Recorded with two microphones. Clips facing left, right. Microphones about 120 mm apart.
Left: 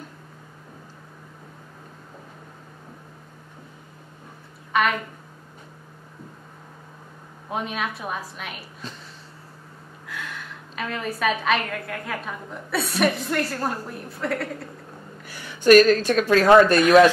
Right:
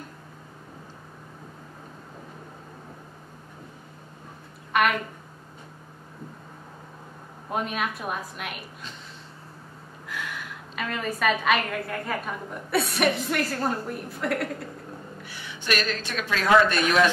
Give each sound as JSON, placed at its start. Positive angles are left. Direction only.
{"t": 7.4, "sound": "a woman's voice", "side_deg": 0}
{"t": 10.1, "sound": "a woman's voice", "side_deg": 0}
{"t": 15.2, "sound": "speech", "side_deg": 45}